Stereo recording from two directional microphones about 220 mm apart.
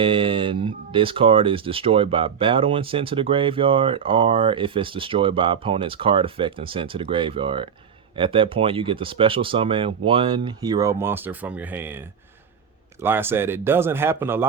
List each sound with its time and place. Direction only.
0.0 s speech: 25° right (ahead or behind)